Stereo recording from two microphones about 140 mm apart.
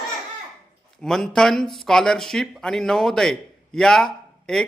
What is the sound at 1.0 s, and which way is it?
Speech, 5° left (ahead or behind).